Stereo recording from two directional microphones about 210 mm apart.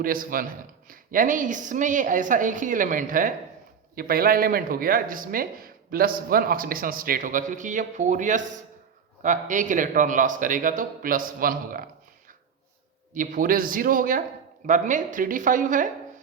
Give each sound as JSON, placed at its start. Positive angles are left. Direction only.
{"t": 0.0, "sound": "a man's voice", "side_deg": -40}
{"t": 13.1, "sound": "a man's voice", "side_deg": -40}